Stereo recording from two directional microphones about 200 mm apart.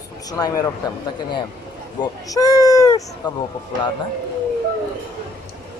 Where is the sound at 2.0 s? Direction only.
15° left (ahead or behind).